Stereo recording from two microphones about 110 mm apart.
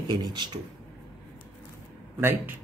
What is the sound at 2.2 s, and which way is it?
Speech, 20° right (ahead or behind).